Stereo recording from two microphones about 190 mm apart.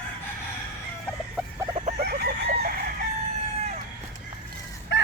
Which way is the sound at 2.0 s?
55° right (ahead or behind).